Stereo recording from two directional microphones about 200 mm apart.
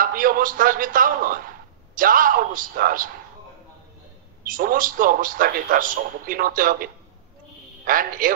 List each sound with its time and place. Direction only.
0.0 s a man's voice: 45° right (ahead or behind)
4.5 s a man's voice: 45° right (ahead or behind)